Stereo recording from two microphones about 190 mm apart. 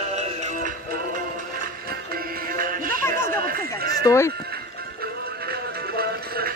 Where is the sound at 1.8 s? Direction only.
50° right (ahead or behind).